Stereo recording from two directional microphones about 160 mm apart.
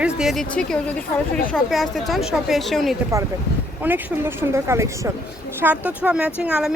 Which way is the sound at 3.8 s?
15° right (ahead or behind).